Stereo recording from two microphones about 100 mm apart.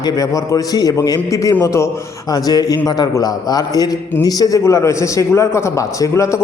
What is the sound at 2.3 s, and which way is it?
A man's voice, 40° left (ahead or behind).